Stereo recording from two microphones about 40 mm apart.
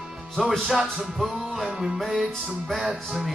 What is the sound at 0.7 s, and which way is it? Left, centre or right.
A man's voice, centre.